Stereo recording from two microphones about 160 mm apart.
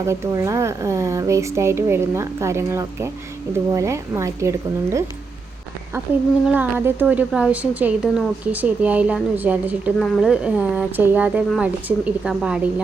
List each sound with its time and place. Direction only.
0.0 s speech: 15° right (ahead or behind)
6.5 s a woman's voice: 10° right (ahead or behind)